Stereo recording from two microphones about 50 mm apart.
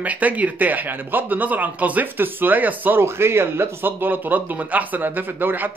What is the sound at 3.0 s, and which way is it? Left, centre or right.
Speech, right.